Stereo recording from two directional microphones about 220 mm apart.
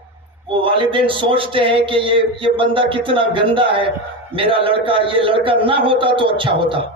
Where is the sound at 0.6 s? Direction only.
25° right (ahead or behind).